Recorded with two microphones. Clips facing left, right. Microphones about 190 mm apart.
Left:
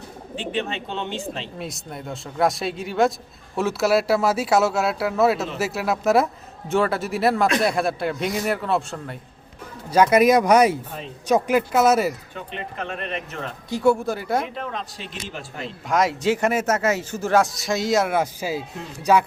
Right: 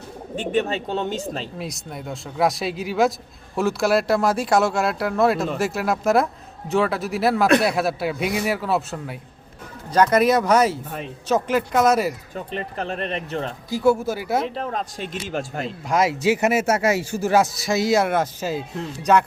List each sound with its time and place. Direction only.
0.3 s speech: 45° right (ahead or behind)
1.5 s speech: centre (ahead or behind)
9.9 s speech: 10° left (ahead or behind)
12.3 s speech: 35° right (ahead or behind)
13.7 s speech: centre (ahead or behind)
14.4 s speech: 35° right (ahead or behind)
15.6 s speech: centre (ahead or behind)
18.2 s speech: 10° left (ahead or behind)